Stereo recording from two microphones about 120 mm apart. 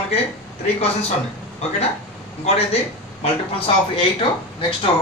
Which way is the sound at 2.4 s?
60° left (ahead or behind).